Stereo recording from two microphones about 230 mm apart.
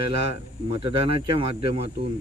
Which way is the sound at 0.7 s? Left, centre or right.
Right.